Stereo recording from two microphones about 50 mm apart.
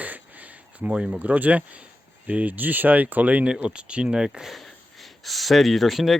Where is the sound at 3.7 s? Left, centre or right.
Right.